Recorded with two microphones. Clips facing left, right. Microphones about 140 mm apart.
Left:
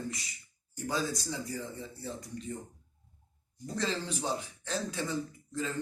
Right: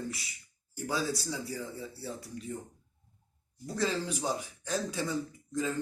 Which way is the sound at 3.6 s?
10° right (ahead or behind).